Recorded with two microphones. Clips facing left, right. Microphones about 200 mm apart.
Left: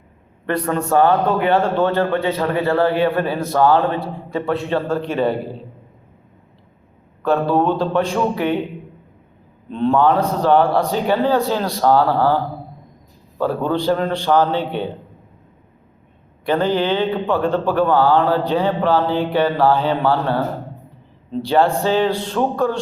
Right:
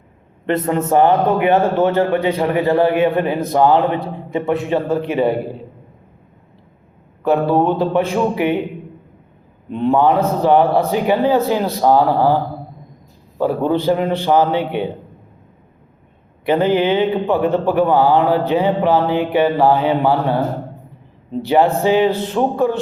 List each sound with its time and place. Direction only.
0.4 s a man's voice: 20° right (ahead or behind)
7.3 s a man's voice: 15° right (ahead or behind)
9.6 s a man's voice: 15° right (ahead or behind)
13.4 s a man's voice: 15° right (ahead or behind)
16.5 s a man's voice: 15° right (ahead or behind)